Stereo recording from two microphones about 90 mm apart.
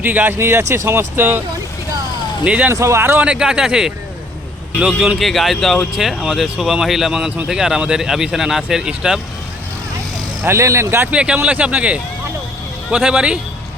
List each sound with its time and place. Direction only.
0.0 s speech: 20° right (ahead or behind)
2.4 s speech: 15° right (ahead or behind)
2.7 s speech: 30° right (ahead or behind)
3.2 s speech: 10° right (ahead or behind)
4.9 s speech: centre (ahead or behind)
10.4 s speech: 30° right (ahead or behind)
11.1 s speech: 10° right (ahead or behind)